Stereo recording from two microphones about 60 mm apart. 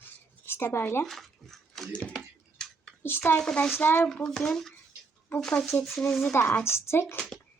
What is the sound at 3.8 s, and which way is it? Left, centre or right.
Speech, left.